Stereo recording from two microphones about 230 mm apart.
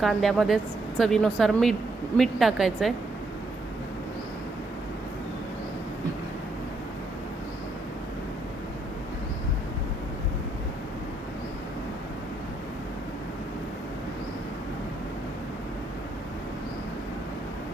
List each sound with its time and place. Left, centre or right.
0.0 s a woman's voice: centre